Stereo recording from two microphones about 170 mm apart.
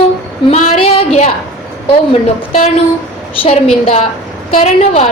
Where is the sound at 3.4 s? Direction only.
35° left (ahead or behind).